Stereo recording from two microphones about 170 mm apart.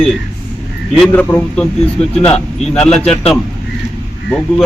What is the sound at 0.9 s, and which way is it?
Speech, 5° left (ahead or behind).